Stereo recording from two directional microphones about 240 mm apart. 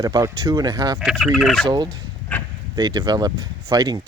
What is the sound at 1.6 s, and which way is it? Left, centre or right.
Speech, centre.